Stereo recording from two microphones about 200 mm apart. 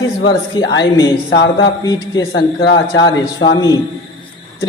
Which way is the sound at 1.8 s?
20° left (ahead or behind).